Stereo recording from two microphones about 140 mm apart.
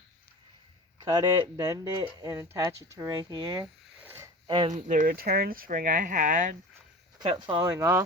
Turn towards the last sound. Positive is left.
turn(degrees=-20)  # may be behind; listen again after turning